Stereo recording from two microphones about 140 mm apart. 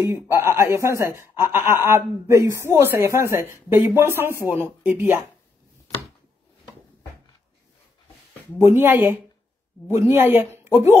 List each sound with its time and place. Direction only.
0.0 s speech: 20° right (ahead or behind)
8.7 s speech: 15° right (ahead or behind)